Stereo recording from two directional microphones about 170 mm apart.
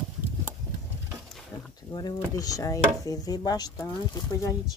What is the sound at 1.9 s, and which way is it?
Speech, 20° left (ahead or behind).